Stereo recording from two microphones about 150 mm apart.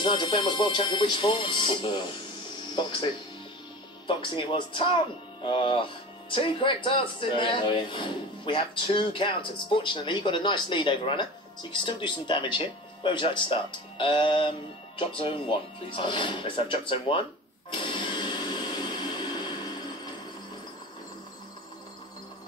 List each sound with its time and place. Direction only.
0.0 s speech: 35° left (ahead or behind)
4.1 s speech: 35° left (ahead or behind)
17.6 s a sound: 35° left (ahead or behind)